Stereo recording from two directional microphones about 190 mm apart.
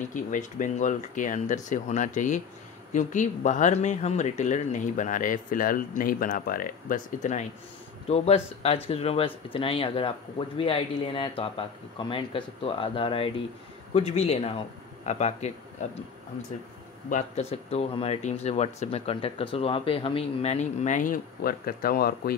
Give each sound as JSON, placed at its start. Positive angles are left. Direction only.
{"t": 0.1, "sound": "speech", "side_deg": 40}
{"t": 17.1, "sound": "speech", "side_deg": 35}